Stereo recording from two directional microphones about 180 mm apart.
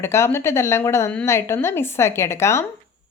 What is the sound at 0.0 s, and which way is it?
A woman's voice, 15° left (ahead or behind).